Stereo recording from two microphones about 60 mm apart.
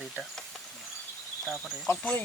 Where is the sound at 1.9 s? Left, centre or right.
Left.